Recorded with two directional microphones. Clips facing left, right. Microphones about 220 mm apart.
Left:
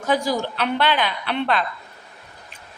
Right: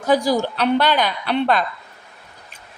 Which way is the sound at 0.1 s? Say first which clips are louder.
Right 4 dB; 35° right (ahead or behind).